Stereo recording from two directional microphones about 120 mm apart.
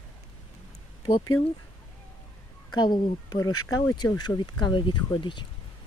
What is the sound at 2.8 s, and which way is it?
Speech, 40° left (ahead or behind).